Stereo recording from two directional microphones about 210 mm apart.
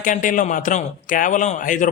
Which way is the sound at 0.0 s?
40° left (ahead or behind).